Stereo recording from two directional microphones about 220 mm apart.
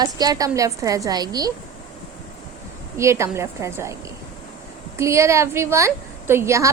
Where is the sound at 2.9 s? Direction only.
10° right (ahead or behind).